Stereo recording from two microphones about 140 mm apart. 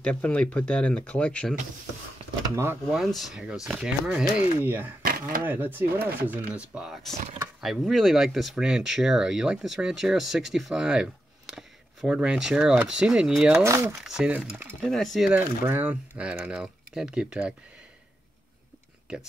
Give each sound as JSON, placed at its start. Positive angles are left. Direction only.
{"t": 0.0, "sound": "speech", "side_deg": 10}
{"t": 2.5, "sound": "speech", "side_deg": -20}
{"t": 2.9, "sound": "speech", "side_deg": 0}
{"t": 13.6, "sound": "speech", "side_deg": -15}
{"t": 14.0, "sound": "speech", "side_deg": -5}
{"t": 14.8, "sound": "speech", "side_deg": 5}